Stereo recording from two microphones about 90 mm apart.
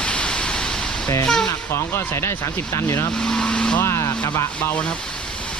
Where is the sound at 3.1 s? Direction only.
5° left (ahead or behind).